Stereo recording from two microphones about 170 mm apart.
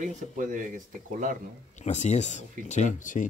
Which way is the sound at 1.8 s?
45° left (ahead or behind).